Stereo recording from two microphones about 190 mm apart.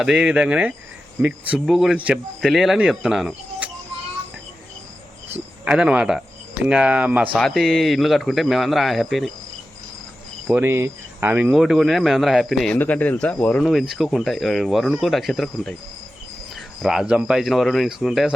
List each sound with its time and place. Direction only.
0.0 s speech: 5° right (ahead or behind)
5.6 s speech: 5° right (ahead or behind)
10.4 s speech: 10° right (ahead or behind)
11.5 s speech: centre (ahead or behind)